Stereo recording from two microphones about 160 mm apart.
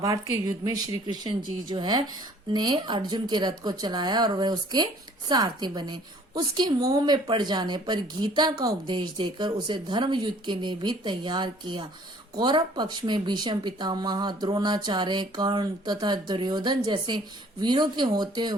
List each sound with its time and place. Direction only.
0.0 s speech: 20° right (ahead or behind)